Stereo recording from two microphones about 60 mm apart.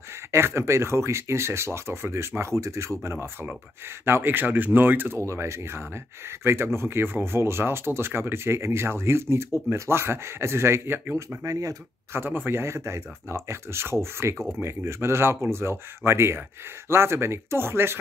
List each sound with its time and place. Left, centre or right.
0.3 s speech: right
5.2 s speech: right
11.1 s speech: right
12.1 s speech: right